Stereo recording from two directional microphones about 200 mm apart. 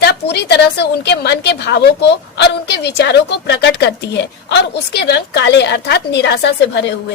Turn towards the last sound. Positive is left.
turn(degrees=60)  # may be behind; listen again after turning